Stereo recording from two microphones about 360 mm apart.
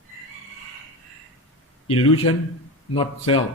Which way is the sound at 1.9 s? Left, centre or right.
Centre.